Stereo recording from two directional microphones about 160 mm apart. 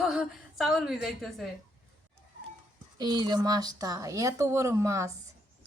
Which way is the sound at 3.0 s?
25° right (ahead or behind).